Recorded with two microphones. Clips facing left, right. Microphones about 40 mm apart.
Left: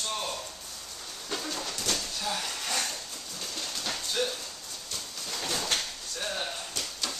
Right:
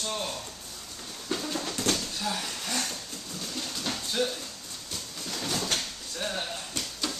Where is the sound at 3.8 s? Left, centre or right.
Centre.